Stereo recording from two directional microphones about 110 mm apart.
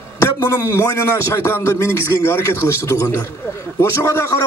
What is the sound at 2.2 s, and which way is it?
A man's voice, 25° left (ahead or behind).